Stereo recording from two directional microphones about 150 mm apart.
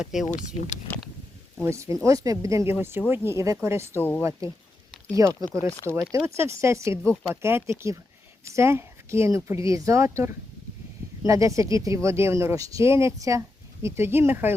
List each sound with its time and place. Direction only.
0.0 s speech: 5° right (ahead or behind)
0.3 s speech: 55° left (ahead or behind)
1.6 s a woman's voice: 20° right (ahead or behind)
3.9 s speech: 15° left (ahead or behind)
4.2 s a woman's voice: 20° right (ahead or behind)
7.0 s speech: 5° left (ahead or behind)
7.4 s a woman's voice: 15° right (ahead or behind)